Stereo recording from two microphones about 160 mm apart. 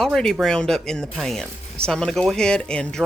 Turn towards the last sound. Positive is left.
turn(degrees=5)  # may be behind; listen again after turning